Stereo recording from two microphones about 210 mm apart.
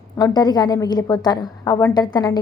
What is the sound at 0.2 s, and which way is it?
A woman's voice, 20° left (ahead or behind).